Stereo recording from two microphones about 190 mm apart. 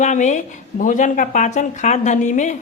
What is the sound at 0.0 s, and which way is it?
Speech, 40° left (ahead or behind).